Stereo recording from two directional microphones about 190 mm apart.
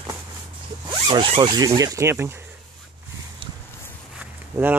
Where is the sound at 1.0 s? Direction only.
25° right (ahead or behind).